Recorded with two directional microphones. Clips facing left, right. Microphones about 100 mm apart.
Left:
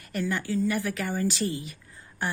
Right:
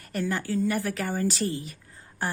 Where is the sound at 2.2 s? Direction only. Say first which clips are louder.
Even; 40° right (ahead or behind).